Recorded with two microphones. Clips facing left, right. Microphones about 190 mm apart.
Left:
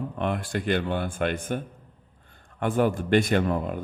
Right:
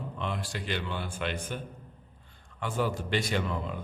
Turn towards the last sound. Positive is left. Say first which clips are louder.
# left 7 dB
turn(degrees=50)  # may be behind; listen again after turning